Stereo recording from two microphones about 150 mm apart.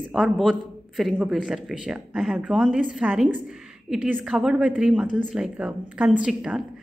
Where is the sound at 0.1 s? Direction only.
Centre (ahead or behind).